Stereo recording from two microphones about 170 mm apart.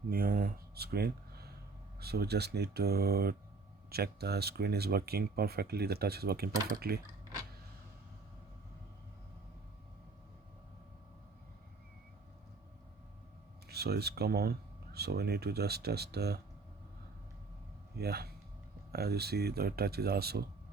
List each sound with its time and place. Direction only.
0.1 s speech: 60° right (ahead or behind)
13.7 s speech: 70° right (ahead or behind)
17.9 s speech: 70° right (ahead or behind)